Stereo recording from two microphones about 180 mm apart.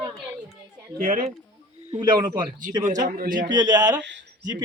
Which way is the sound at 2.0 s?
25° right (ahead or behind).